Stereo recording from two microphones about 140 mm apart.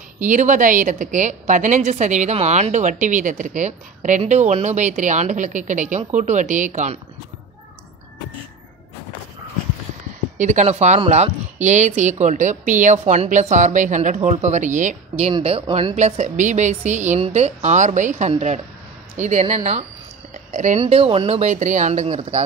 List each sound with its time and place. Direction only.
0.2 s speech: 65° right (ahead or behind)
10.3 s speech: 60° right (ahead or behind)
15.3 s speech: 45° right (ahead or behind)
16.0 s speech: 60° right (ahead or behind)